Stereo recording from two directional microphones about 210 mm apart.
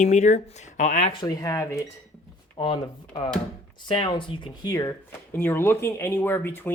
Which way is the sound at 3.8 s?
20° left (ahead or behind).